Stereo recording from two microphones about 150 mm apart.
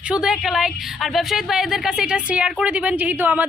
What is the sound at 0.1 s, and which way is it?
A woman's voice, 5° right (ahead or behind).